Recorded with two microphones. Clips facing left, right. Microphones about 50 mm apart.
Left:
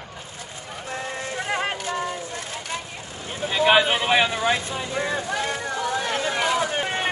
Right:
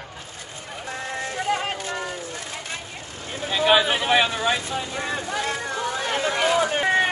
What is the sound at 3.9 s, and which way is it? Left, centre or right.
Vehicle, centre.